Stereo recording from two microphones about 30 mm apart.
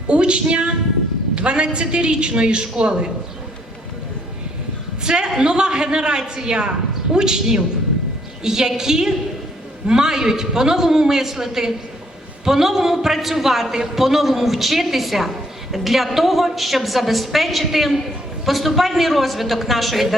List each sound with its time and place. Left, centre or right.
0.1 s a man's voice: right
4.9 s a woman's voice: right; by 20.1 s centre